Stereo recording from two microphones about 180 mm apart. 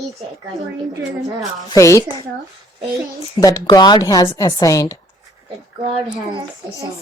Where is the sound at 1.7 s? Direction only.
15° left (ahead or behind).